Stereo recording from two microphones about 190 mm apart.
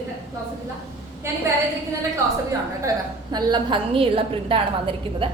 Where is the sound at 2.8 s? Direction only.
20° right (ahead or behind).